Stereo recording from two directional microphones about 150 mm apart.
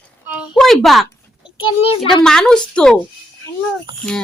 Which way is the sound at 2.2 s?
5° left (ahead or behind).